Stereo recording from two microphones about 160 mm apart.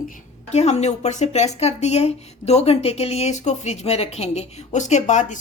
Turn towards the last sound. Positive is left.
turn(degrees=50)  # may be behind; listen again after turning